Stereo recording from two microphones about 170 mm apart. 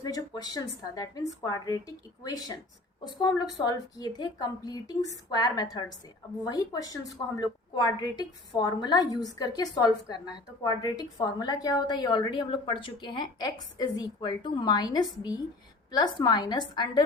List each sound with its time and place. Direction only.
0.0 s a woman's voice: 20° left (ahead or behind)